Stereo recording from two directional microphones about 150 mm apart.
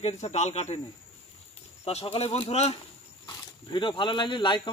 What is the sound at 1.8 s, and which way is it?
Speech, 40° left (ahead or behind).